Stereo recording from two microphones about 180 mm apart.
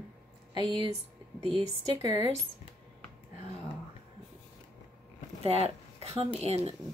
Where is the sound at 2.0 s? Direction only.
35° left (ahead or behind).